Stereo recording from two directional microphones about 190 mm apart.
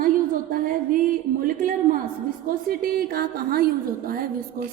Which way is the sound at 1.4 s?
45° right (ahead or behind).